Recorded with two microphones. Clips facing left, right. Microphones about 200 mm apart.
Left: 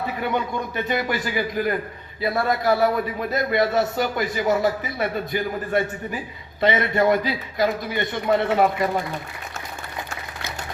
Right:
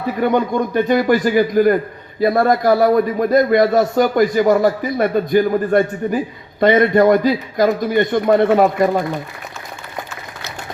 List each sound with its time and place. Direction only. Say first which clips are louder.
0.2 s a man's voice: right 11 dB; 45° right (ahead or behind)